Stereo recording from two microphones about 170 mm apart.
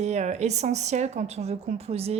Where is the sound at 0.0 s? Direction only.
40° right (ahead or behind).